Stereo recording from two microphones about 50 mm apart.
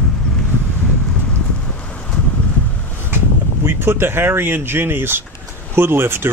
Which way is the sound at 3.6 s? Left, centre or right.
Right.